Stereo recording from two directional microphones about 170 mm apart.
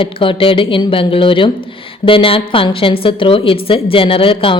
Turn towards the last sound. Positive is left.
turn(degrees=30)  # may be behind; listen again after turning